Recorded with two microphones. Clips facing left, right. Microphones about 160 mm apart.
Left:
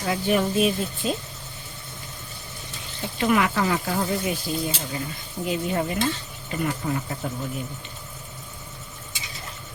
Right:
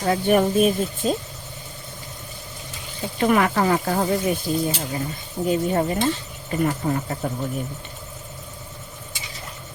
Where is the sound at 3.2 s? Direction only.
45° right (ahead or behind).